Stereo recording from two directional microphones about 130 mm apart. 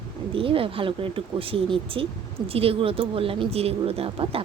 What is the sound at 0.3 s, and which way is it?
Speech, 45° right (ahead or behind).